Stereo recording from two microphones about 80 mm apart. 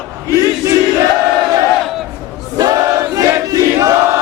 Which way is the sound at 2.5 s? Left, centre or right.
Right.